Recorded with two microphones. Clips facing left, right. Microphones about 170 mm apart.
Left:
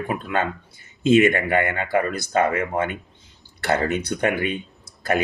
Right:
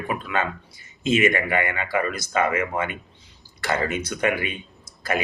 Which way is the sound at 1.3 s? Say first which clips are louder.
Left 2 dB; 55° left (ahead or behind).